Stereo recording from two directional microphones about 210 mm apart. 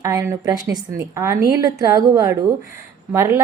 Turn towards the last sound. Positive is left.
turn(degrees=-10)  # may be behind; listen again after turning